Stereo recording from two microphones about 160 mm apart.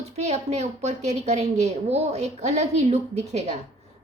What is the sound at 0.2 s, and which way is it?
A woman's voice, 45° right (ahead or behind).